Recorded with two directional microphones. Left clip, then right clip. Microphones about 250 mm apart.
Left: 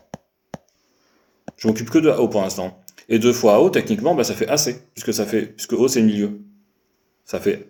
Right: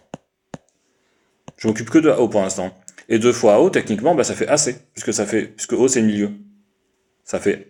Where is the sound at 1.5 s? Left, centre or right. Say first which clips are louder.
Right 2 dB; right.